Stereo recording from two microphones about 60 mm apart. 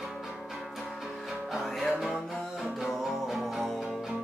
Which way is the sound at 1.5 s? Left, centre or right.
Centre.